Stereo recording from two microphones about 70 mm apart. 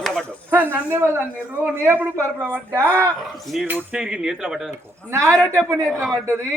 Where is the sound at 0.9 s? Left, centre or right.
Right.